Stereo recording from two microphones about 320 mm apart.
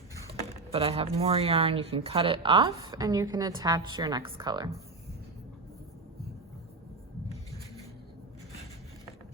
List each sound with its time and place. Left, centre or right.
0.7 s a woman's voice: centre